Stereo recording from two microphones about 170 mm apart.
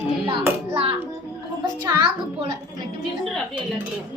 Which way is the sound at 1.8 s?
25° right (ahead or behind).